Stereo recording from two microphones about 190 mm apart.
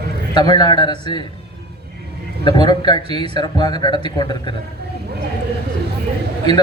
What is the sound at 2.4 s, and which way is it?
A man's voice, 25° left (ahead or behind).